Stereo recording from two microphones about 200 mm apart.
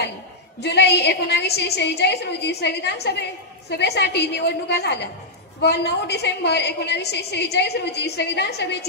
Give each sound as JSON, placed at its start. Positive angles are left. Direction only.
{"t": 0.6, "sound": "a woman's voice", "side_deg": 55}